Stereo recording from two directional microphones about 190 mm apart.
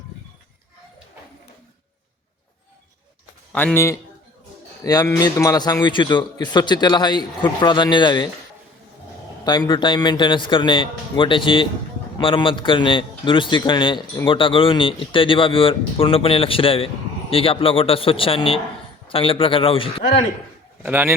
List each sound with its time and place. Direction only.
3.5 s a man's voice: 10° left (ahead or behind)
9.4 s a man's voice: 20° left (ahead or behind)
20.8 s speech: 10° right (ahead or behind)